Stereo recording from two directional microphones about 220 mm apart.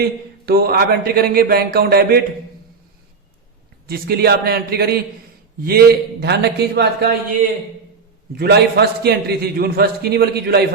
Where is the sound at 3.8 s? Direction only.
45° right (ahead or behind).